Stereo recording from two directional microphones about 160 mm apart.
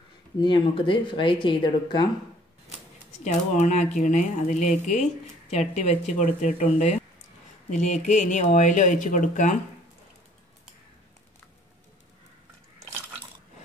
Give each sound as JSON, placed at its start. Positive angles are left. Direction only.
{"t": 0.4, "sound": "speech", "side_deg": 30}
{"t": 3.5, "sound": "speech", "side_deg": 45}